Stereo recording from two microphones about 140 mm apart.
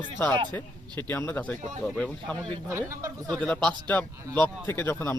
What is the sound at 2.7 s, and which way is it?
Speech, 20° right (ahead or behind).